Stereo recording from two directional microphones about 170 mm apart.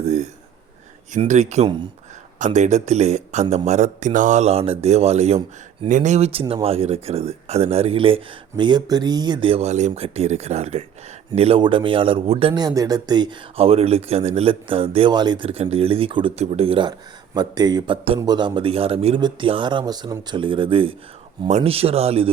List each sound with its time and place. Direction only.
0.0 s a man's voice: 40° right (ahead or behind)
1.6 s speech: 25° right (ahead or behind)
2.4 s a man's voice: 45° right (ahead or behind)